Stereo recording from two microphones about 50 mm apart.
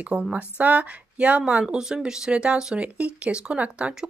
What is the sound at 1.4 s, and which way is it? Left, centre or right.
Speech, centre.